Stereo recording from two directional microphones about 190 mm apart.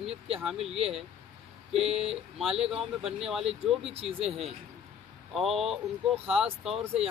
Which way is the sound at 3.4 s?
30° right (ahead or behind).